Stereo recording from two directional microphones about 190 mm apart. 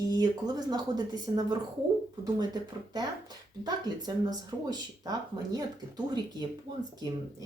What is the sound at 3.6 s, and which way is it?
Speech, 20° right (ahead or behind).